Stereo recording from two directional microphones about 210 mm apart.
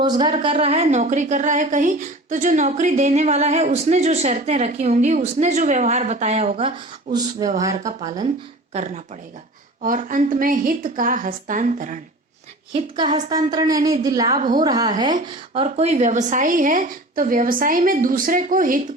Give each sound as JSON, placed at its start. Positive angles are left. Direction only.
{"t": 0.0, "sound": "a woman's voice", "side_deg": -20}
{"t": 0.5, "sound": "a woman's voice", "side_deg": -30}
{"t": 9.8, "sound": "a woman's voice", "side_deg": -40}
{"t": 12.7, "sound": "a woman's voice", "side_deg": -20}
{"t": 14.3, "sound": "a woman's voice", "side_deg": -35}
{"t": 14.6, "sound": "a woman's voice", "side_deg": -15}